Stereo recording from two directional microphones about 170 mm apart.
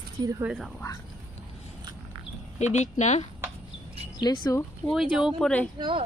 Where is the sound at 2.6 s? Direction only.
45° left (ahead or behind).